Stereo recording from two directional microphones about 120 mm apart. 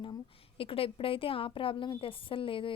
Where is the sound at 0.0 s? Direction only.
45° left (ahead or behind).